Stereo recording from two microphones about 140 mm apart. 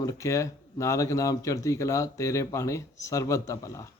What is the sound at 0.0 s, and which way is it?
A man's voice, 20° left (ahead or behind).